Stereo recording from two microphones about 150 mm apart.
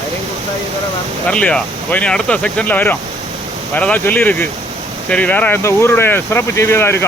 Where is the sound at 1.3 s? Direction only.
5° left (ahead or behind).